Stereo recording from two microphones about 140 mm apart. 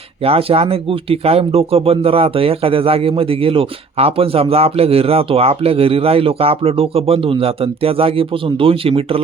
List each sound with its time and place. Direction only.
0.3 s speech: 45° right (ahead or behind)